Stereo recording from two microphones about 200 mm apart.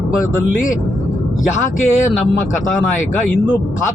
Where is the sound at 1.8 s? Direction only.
40° left (ahead or behind).